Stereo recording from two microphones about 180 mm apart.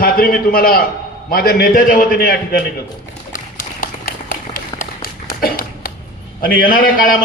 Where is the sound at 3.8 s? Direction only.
50° left (ahead or behind).